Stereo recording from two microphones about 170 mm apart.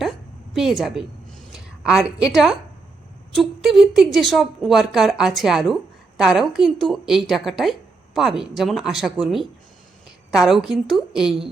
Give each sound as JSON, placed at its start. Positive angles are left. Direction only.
{"t": 0.5, "sound": "a woman's voice", "side_deg": 0}